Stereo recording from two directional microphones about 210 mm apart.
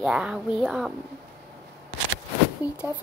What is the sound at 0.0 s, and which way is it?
Speech, 5° right (ahead or behind).